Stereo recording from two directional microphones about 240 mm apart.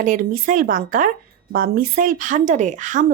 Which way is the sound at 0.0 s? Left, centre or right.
Right.